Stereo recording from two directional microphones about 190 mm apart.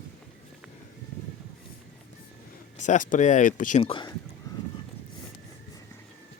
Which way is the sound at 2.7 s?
40° left (ahead or behind).